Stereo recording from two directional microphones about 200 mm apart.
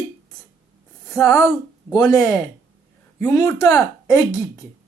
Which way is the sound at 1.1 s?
15° left (ahead or behind).